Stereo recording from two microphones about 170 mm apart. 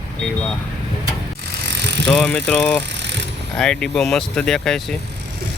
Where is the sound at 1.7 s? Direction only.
90° right.